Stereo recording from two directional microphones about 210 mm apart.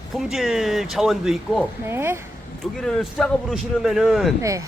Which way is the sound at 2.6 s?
Centre (ahead or behind).